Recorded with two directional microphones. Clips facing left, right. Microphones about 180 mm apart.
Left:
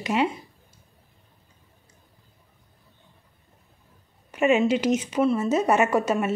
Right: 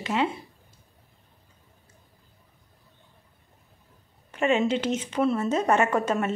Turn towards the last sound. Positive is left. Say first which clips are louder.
# left 2 dB
turn(degrees=10)  # may be behind; listen again after turning